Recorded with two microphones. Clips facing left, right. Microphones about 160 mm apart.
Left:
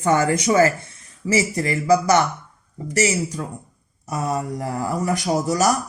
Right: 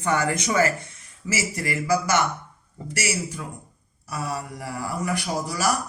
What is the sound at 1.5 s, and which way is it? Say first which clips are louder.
Speech: left 3 dB; 35° left (ahead or behind).